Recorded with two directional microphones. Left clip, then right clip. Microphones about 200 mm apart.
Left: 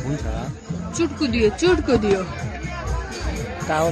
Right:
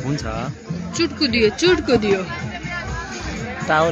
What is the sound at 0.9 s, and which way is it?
Speech, 30° left (ahead or behind).